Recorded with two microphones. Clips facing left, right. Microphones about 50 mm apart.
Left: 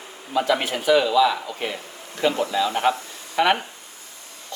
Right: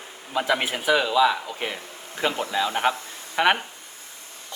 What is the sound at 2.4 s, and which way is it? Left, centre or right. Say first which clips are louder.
A man's voice: left 2 dB; right.